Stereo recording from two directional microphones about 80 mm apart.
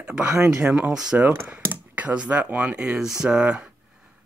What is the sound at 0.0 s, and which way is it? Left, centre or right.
Speech, centre.